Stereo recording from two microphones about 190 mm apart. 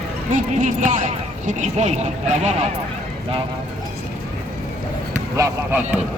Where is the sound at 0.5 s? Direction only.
40° right (ahead or behind).